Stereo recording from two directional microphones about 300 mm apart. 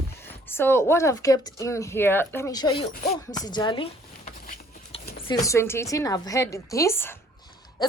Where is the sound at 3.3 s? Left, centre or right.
Centre.